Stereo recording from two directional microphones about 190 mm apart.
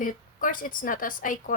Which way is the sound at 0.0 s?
45° left (ahead or behind).